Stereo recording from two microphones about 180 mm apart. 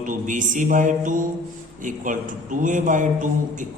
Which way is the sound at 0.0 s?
45° right (ahead or behind).